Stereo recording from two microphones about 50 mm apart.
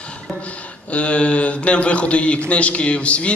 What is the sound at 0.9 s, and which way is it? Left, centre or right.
A man's voice, left.